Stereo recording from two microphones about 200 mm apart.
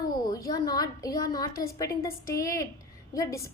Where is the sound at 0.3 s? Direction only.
15° left (ahead or behind).